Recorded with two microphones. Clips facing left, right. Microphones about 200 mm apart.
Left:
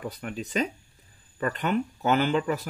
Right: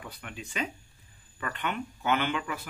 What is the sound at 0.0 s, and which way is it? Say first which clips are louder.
Speech: left 9 dB; 40° left (ahead or behind).